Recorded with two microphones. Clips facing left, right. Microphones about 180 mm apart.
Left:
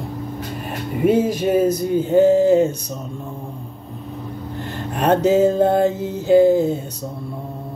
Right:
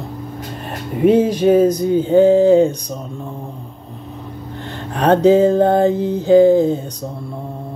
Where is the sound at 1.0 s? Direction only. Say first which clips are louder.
Right 4 dB; 5° left (ahead or behind).